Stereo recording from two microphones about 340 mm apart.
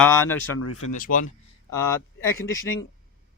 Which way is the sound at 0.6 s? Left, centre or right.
Left.